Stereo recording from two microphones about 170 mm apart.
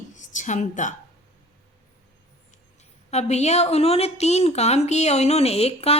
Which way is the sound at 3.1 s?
40° left (ahead or behind).